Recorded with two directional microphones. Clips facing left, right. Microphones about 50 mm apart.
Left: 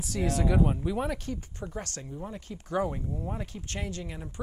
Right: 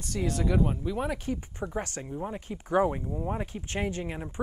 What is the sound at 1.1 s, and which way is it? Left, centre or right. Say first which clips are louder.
Speech: right 3 dB; centre.